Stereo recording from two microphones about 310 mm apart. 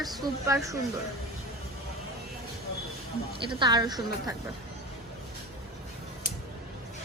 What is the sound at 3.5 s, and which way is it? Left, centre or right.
Speech, centre.